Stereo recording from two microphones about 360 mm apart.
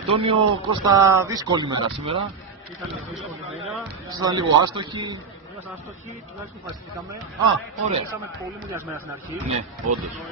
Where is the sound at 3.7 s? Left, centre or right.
Centre.